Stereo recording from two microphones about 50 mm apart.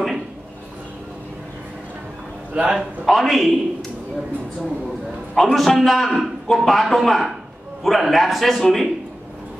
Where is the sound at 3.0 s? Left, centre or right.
Centre.